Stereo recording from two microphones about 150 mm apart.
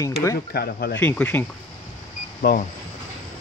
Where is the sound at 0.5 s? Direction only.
90° left.